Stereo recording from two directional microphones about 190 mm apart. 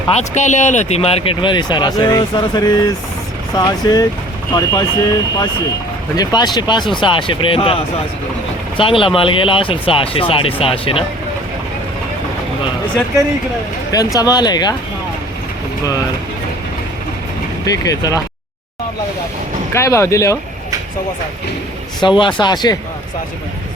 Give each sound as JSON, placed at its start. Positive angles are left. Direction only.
{"t": 0.1, "sound": "speech", "side_deg": 35}
{"t": 6.1, "sound": "speech", "side_deg": 20}
{"t": 8.8, "sound": "speech", "side_deg": 30}
{"t": 13.9, "sound": "speech", "side_deg": 20}
{"t": 17.7, "sound": "speech", "side_deg": 20}
{"t": 19.7, "sound": "speech", "side_deg": 15}
{"t": 22.2, "sound": "speech", "side_deg": 25}